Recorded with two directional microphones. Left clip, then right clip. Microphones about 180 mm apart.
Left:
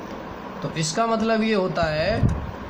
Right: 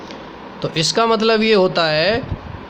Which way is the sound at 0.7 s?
50° right (ahead or behind).